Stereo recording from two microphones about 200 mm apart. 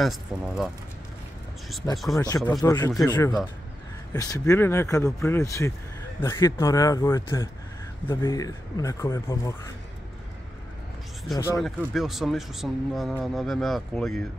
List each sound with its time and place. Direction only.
0.0 s speech: centre (ahead or behind)
2.1 s speech: 15° left (ahead or behind)
11.3 s speech: 15° left (ahead or behind)
11.6 s speech: centre (ahead or behind)